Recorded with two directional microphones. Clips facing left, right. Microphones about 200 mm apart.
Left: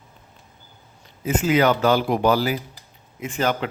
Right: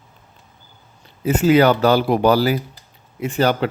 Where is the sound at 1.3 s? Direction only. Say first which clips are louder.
Right 5 dB; 35° right (ahead or behind).